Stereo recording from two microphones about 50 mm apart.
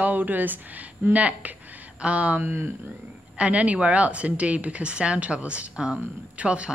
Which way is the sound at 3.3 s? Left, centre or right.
Right.